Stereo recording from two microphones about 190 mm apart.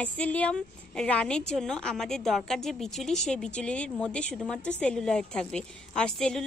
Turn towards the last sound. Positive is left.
turn(degrees=5)  # may be behind; listen again after turning